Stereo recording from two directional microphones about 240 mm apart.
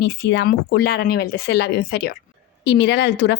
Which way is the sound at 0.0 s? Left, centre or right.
Left.